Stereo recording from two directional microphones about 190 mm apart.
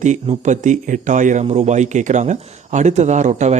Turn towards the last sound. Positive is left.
turn(degrees=-40)  # may be behind; listen again after turning